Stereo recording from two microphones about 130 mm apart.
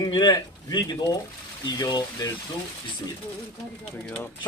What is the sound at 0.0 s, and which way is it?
Speech, 30° left (ahead or behind).